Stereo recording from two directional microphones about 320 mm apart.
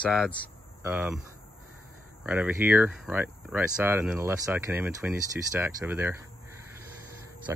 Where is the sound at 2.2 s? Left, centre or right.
Centre.